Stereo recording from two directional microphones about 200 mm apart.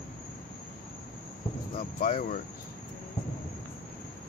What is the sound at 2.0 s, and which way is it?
Speech, 45° left (ahead or behind).